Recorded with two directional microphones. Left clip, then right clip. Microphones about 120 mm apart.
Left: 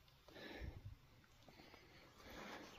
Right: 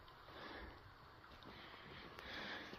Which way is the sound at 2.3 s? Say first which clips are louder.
Right 5 dB; 10° left (ahead or behind).